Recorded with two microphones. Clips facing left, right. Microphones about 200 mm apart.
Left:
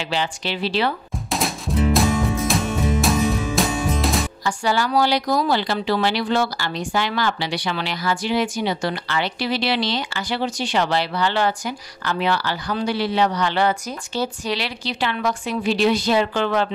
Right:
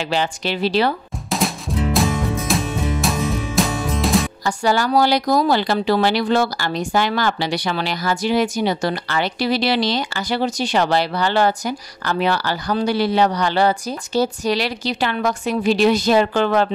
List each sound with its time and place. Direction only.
0.1 s speech: 45° right (ahead or behind)
2.0 s music: centre (ahead or behind)
4.5 s speech: 45° right (ahead or behind)